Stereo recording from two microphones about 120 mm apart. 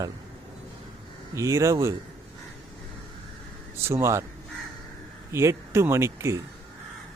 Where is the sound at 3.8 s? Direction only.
20° right (ahead or behind).